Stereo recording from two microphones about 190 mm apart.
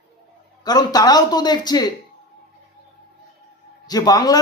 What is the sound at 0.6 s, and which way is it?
Speech, 20° left (ahead or behind).